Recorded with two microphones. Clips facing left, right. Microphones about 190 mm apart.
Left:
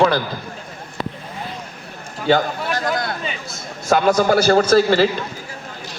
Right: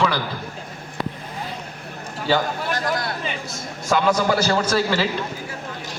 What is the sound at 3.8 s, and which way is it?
A man's voice, 55° left (ahead or behind).